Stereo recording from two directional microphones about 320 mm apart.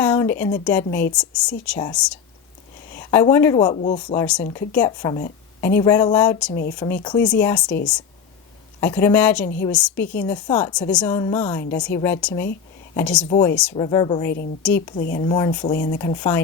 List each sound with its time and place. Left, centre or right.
0.0 s a sound: centre
0.6 s a woman's voice: centre
3.8 s speech: left
4.0 s a woman's voice: centre
4.9 s a woman's voice: centre
6.5 s speech: left
6.7 s a woman's voice: centre
8.8 s a woman's voice: centre
14.9 s speech: left
15.3 s a woman's voice: centre
15.7 s speech: left
16.0 s a woman's voice: centre